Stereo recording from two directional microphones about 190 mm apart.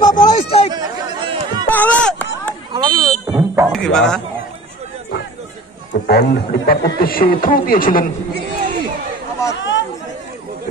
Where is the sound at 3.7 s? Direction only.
5° left (ahead or behind).